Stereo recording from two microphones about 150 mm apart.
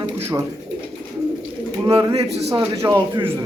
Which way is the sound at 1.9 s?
25° right (ahead or behind).